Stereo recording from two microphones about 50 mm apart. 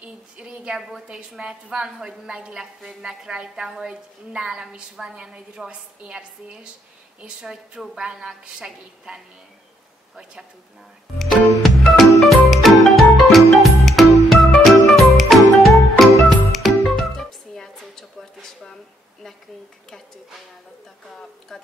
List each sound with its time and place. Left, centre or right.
0.0 s a woman's voice: right
0.7 s a woman's voice: centre
11.1 s music: centre
21.5 s a sound: centre